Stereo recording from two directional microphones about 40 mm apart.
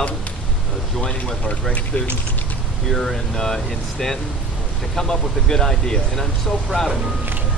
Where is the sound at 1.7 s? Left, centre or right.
Left.